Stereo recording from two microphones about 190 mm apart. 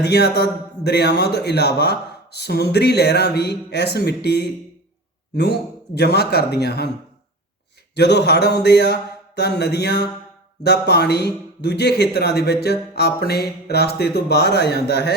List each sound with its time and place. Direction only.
0.0 s speech: 60° left (ahead or behind)
7.9 s speech: 65° left (ahead or behind)